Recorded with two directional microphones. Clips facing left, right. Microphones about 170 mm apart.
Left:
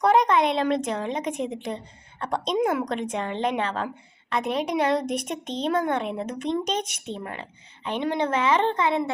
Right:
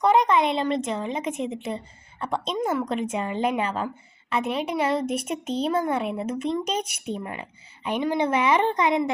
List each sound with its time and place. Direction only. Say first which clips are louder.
0.0 s a woman's voice: even; centre (ahead or behind)